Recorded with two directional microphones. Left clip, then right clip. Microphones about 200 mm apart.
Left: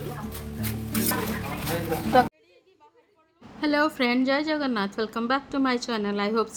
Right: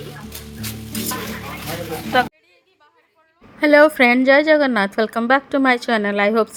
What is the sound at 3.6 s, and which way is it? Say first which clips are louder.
Speech: right 12 dB; 30° right (ahead or behind).